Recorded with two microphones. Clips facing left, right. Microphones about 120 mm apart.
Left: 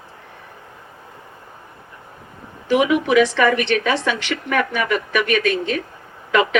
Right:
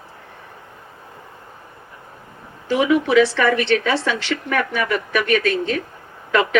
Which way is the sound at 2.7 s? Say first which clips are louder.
Even; 20° left (ahead or behind).